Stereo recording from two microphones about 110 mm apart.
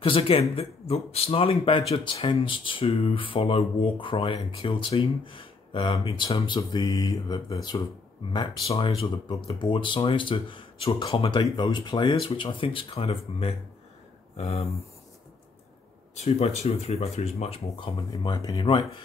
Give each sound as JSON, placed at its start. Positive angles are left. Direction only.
{"t": 0.0, "sound": "speech", "side_deg": 55}
{"t": 8.6, "sound": "speech", "side_deg": 60}
{"t": 12.2, "sound": "speech", "side_deg": 55}
{"t": 16.3, "sound": "speech", "side_deg": 70}
{"t": 18.2, "sound": "speech", "side_deg": 40}
{"t": 18.7, "sound": "speech", "side_deg": 50}